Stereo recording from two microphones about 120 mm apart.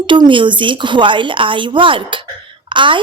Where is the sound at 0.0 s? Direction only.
45° right (ahead or behind).